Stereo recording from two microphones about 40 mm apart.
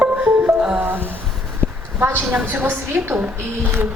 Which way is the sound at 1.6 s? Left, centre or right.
Left.